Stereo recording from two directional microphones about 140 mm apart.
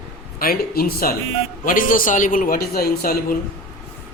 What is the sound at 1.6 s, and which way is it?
A man's voice, 75° left (ahead or behind).